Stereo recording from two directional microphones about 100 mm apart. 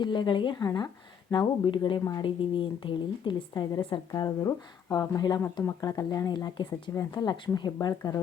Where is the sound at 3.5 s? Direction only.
45° left (ahead or behind).